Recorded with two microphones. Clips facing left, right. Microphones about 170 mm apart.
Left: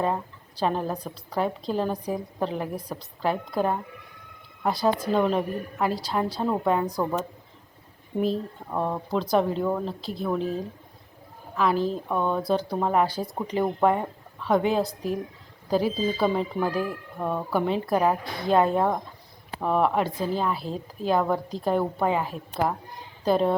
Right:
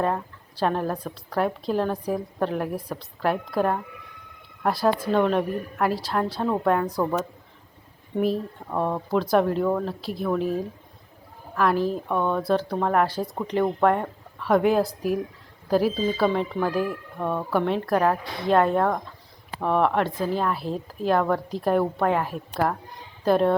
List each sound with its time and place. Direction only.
0.0 s speech: centre (ahead or behind)
8.2 s speech: 5° right (ahead or behind)